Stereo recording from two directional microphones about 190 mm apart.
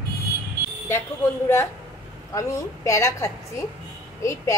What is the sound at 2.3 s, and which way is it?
A woman's voice, 15° left (ahead or behind).